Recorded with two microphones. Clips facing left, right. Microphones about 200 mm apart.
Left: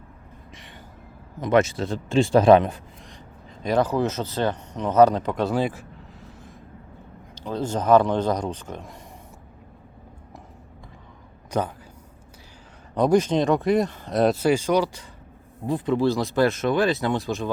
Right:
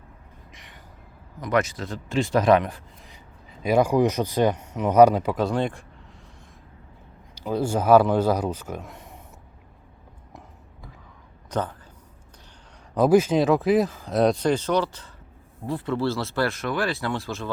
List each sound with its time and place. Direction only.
1.4 s speech: 25° left (ahead or behind)
3.6 s speech: 10° right (ahead or behind)
7.3 s speech: 10° right (ahead or behind)
11.5 s a man's voice: 10° left (ahead or behind)
12.9 s speech: 5° right (ahead or behind); by 17.5 s 20° left (ahead or behind)